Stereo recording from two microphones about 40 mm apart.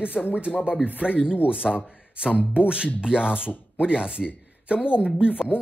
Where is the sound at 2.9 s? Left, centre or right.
Right.